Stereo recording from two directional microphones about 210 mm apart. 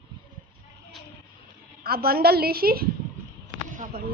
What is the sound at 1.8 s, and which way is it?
A woman's voice, 45° right (ahead or behind).